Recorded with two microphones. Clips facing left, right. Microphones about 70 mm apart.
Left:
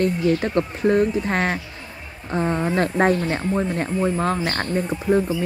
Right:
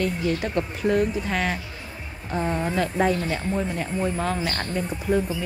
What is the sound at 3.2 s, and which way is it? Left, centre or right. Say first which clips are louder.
Speech: left 4 dB; left.